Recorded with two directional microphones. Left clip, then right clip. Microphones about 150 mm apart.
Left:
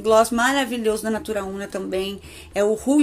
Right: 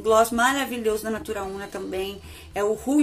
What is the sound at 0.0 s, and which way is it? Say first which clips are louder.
Speech: left 2 dB; 25° left (ahead or behind).